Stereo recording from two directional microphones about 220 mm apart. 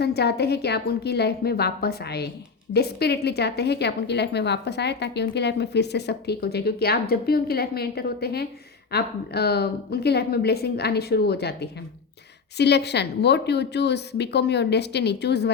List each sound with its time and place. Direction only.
0.0 s a woman's voice: 50° left (ahead or behind)